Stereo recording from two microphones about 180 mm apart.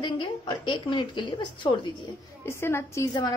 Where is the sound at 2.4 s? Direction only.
15° left (ahead or behind).